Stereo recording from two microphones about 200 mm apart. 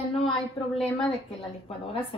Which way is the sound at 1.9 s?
25° left (ahead or behind).